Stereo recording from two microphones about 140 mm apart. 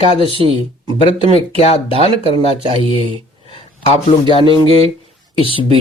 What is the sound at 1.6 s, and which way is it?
Speech, 45° left (ahead or behind).